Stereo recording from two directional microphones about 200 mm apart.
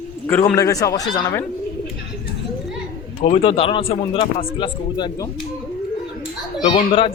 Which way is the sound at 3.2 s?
30° left (ahead or behind).